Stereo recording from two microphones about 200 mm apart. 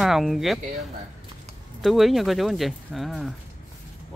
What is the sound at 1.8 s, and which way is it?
Speech, centre (ahead or behind).